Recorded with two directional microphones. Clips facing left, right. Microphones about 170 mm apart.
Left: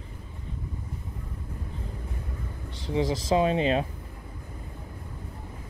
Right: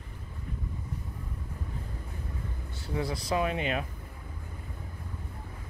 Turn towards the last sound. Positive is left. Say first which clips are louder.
# left 6 dB
turn(degrees=30)  # may be behind; listen again after turning